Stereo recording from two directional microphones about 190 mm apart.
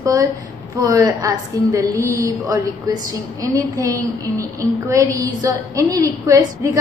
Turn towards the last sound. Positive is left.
turn(degrees=-15)  # may be behind; listen again after turning